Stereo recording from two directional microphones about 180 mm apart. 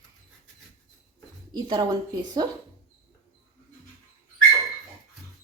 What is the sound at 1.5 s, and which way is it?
Speech, 25° right (ahead or behind).